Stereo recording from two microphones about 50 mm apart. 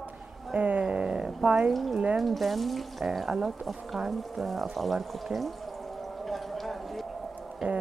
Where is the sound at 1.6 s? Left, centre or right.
Centre.